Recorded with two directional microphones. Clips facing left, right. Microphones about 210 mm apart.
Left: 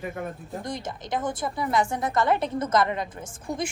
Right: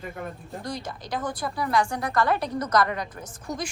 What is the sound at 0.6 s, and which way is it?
Speech, 20° left (ahead or behind).